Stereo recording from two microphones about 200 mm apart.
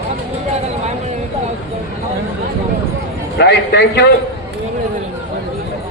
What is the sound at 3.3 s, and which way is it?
Speech, 55° left (ahead or behind).